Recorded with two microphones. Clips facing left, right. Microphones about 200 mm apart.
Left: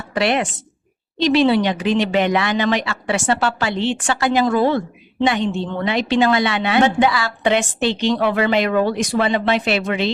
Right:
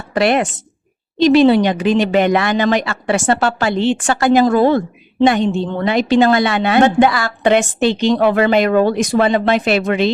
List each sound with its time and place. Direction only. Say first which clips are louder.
0.1 s a woman's voice: right 4 dB; 45° right (ahead or behind)